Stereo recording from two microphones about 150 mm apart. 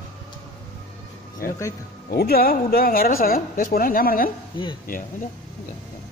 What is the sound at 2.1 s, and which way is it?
Speech, 90° left.